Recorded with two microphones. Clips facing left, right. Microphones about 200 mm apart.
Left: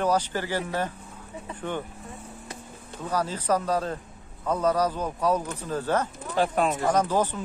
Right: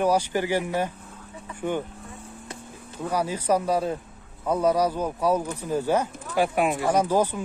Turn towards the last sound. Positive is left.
turn(degrees=-10)  # may be behind; listen again after turning